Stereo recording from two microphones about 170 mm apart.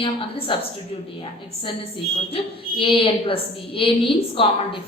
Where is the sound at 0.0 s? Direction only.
30° left (ahead or behind).